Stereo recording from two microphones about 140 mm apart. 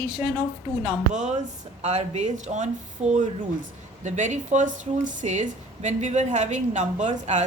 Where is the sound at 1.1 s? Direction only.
55° right (ahead or behind).